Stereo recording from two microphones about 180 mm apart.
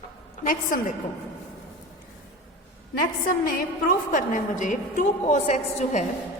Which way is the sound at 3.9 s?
45° left (ahead or behind).